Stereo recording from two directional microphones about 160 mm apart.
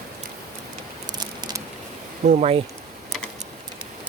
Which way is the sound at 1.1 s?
25° right (ahead or behind).